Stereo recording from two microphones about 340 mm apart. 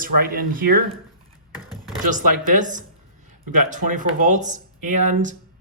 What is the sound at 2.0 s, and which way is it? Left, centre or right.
Speech, right.